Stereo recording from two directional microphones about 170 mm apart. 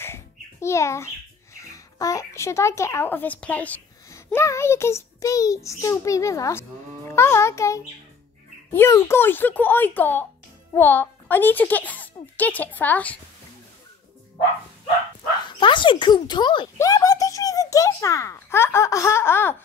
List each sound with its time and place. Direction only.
0.0 s a child's voice: 15° left (ahead or behind)
15.4 s a child's voice: 30° left (ahead or behind)